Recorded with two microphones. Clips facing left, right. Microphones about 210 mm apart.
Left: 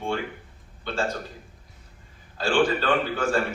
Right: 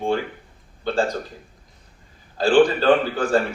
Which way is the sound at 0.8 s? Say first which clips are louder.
Right 6 dB; 35° right (ahead or behind).